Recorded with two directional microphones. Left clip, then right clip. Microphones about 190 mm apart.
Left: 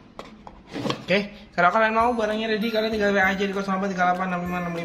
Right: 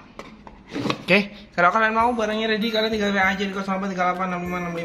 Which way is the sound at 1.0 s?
20° right (ahead or behind).